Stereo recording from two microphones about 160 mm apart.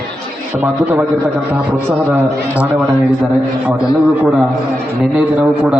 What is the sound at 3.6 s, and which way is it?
A man's voice, 5° right (ahead or behind).